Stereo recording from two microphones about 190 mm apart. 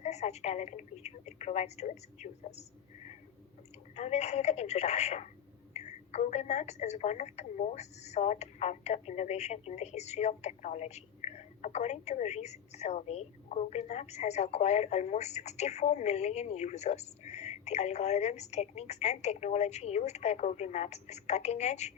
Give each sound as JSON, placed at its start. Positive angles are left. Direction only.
{"t": 0.0, "sound": "a woman's voice", "side_deg": 35}
{"t": 3.9, "sound": "a woman's voice", "side_deg": 35}